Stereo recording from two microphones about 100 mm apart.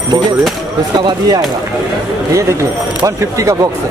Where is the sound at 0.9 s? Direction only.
50° right (ahead or behind).